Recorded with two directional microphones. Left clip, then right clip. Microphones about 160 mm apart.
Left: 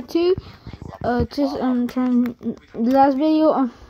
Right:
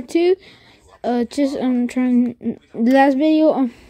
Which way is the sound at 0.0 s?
20° right (ahead or behind).